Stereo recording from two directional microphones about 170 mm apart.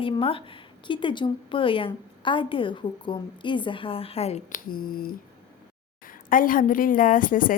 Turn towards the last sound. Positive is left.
turn(degrees=55)  # may be behind; listen again after turning